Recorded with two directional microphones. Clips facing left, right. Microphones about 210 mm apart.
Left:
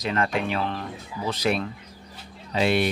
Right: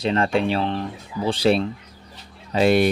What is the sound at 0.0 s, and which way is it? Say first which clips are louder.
Speech: right 5 dB; 30° right (ahead or behind).